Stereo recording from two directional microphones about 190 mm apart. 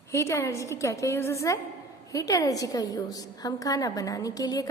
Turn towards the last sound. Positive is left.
turn(degrees=20)  # may be behind; listen again after turning